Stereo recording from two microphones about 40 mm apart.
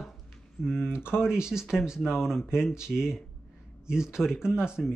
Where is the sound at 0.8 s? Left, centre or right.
Left.